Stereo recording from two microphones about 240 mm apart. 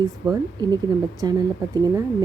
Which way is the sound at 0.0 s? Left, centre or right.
Centre.